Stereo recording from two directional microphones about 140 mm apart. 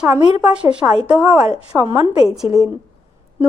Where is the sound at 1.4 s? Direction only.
45° left (ahead or behind).